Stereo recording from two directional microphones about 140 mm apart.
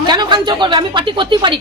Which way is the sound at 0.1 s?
30° right (ahead or behind).